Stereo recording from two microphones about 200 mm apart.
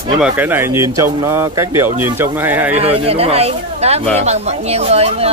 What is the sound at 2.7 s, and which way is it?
Speech, 30° right (ahead or behind).